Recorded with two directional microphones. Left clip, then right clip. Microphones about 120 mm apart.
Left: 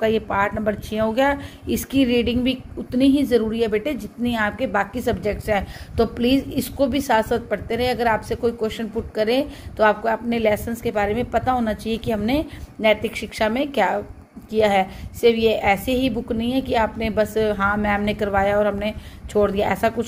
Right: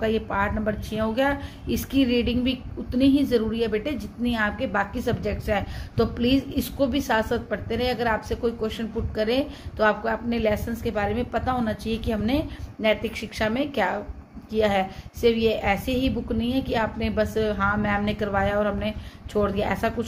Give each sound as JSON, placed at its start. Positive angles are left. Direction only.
{"t": 0.0, "sound": "speech", "side_deg": 40}